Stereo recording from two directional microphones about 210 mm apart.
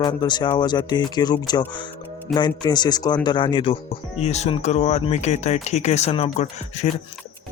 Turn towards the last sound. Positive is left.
turn(degrees=30)  # may be behind; listen again after turning